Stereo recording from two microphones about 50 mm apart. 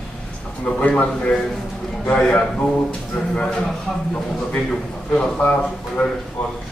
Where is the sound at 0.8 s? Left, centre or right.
Left.